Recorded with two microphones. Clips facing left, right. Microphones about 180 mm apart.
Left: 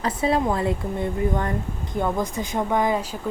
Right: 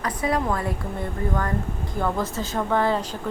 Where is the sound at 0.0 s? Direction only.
25° left (ahead or behind).